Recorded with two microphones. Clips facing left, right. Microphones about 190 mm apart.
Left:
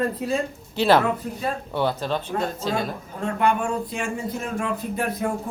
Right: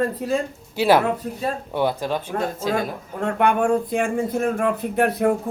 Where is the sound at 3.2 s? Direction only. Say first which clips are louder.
Right 3 dB; 60° right (ahead or behind).